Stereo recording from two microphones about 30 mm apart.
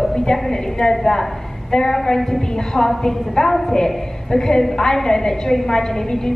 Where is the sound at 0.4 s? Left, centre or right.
Centre.